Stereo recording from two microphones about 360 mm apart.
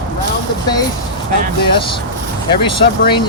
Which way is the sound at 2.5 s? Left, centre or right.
Centre.